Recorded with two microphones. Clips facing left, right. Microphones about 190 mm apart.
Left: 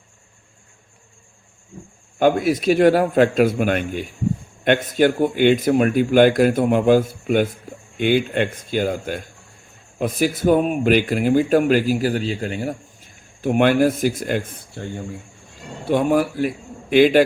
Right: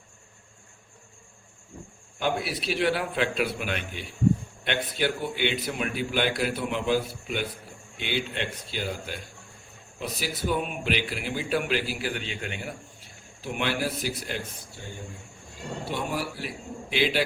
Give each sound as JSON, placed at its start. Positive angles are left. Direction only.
{"t": 2.1, "sound": "speech", "side_deg": 50}
{"t": 13.4, "sound": "speech", "side_deg": 50}